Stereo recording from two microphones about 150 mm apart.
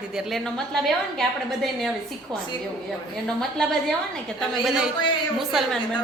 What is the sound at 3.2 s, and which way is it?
A woman's voice, 5° left (ahead or behind).